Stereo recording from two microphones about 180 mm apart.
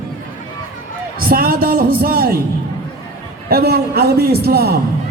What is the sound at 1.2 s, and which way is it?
A man's voice, 55° right (ahead or behind).